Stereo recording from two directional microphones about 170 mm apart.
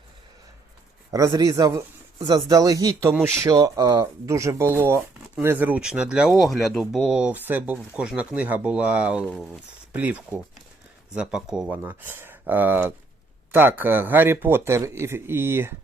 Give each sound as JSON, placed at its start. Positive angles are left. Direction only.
{"t": 1.1, "sound": "speech", "side_deg": -20}